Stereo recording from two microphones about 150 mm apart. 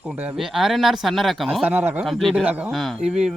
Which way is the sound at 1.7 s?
10° right (ahead or behind).